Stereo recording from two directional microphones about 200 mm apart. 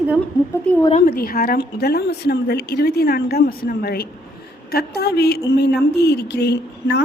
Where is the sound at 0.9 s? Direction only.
35° left (ahead or behind).